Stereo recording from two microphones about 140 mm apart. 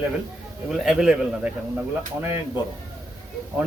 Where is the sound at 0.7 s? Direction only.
5° right (ahead or behind).